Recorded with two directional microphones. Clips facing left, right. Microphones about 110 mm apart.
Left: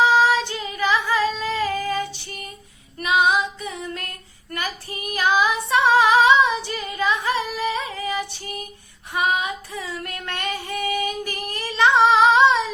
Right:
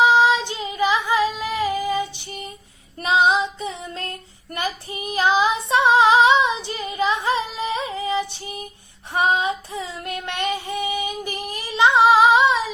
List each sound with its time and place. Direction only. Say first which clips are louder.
0.0 s female singing: right 1 dB; 20° right (ahead or behind)
9.1 s female singing: right 3 dB; 30° right (ahead or behind); by 12.7 s 10° right (ahead or behind)